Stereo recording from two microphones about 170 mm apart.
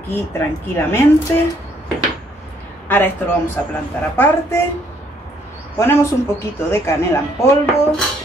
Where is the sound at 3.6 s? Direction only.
10° left (ahead or behind).